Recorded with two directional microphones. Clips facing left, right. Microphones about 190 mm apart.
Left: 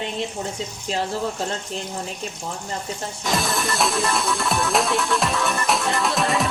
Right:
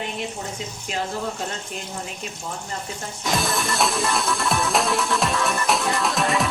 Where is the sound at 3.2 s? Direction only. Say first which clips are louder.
Even; centre (ahead or behind).